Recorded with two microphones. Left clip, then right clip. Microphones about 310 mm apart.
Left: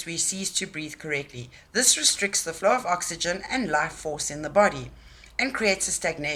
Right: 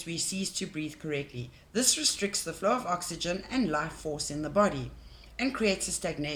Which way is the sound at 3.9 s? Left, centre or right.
Left.